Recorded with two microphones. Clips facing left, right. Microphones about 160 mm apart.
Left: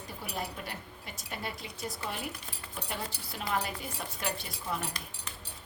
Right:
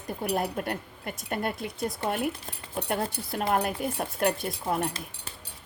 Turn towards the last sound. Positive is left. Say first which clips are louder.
# right 8 dB
turn(degrees=-50)  # may be behind; listen again after turning